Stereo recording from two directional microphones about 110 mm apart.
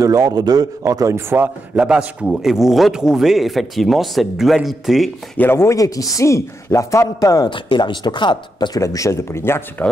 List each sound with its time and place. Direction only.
0.0 s a man's voice: 30° right (ahead or behind)
1.8 s a man's voice: 10° right (ahead or behind)
5.4 s speech: 20° left (ahead or behind)
7.4 s speech: 45° left (ahead or behind)
8.8 s speech: 30° left (ahead or behind)